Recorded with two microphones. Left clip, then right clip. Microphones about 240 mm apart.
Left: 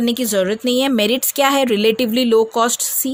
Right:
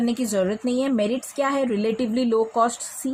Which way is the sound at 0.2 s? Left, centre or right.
Left.